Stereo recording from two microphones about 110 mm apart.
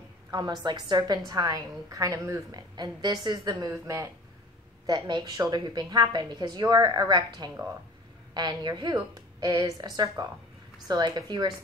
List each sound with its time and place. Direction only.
0.3 s a woman's voice: 40° right (ahead or behind)
4.8 s a woman's voice: 40° right (ahead or behind)